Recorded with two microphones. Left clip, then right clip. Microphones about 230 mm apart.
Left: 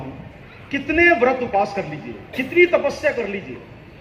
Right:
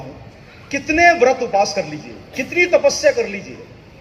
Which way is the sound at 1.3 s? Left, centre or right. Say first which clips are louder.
Right 3 dB; right.